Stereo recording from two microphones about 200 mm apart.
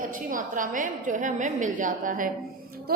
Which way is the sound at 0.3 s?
40° right (ahead or behind).